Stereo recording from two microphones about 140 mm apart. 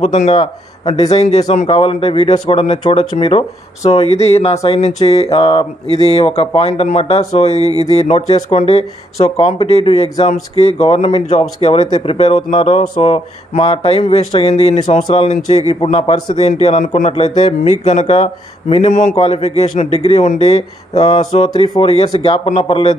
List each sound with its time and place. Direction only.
0.0 s speech: 55° left (ahead or behind)
0.4 s speech: 40° left (ahead or behind)